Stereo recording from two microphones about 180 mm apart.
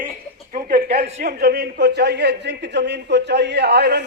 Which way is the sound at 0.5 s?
55° right (ahead or behind).